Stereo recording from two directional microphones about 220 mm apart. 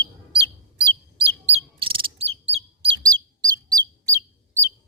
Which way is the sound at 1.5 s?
25° right (ahead or behind).